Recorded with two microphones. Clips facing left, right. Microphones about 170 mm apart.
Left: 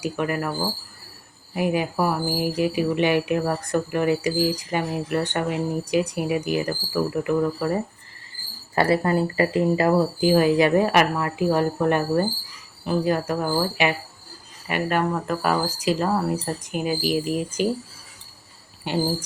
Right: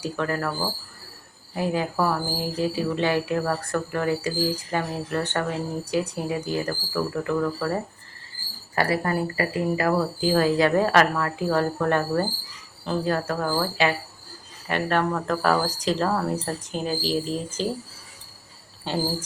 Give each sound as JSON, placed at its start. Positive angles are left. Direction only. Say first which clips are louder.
{"t": 0.0, "sound": "speech", "louder": "left 1 dB", "side_deg": 15}
{"t": 1.5, "sound": "speech", "louder": "left 2 dB", "side_deg": 15}
{"t": 8.7, "sound": "speech", "louder": "left 4 dB", "side_deg": 25}
{"t": 18.9, "sound": "speech", "louder": "left 2 dB", "side_deg": 15}